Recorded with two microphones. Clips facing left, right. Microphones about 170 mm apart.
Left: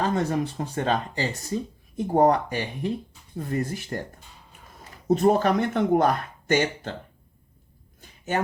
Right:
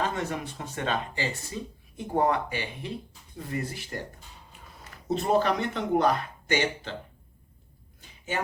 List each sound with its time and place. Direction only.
0.1 s speech: 35° left (ahead or behind)
5.0 s speech: 45° left (ahead or behind)